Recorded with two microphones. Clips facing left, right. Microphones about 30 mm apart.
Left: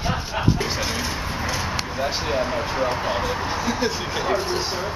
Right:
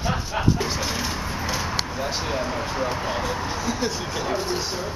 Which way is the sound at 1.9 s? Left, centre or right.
Centre.